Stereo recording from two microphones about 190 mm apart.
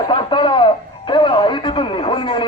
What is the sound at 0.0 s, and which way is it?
Radio, 25° left (ahead or behind).